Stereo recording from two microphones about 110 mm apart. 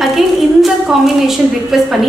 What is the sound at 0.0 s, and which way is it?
A woman's voice, centre (ahead or behind).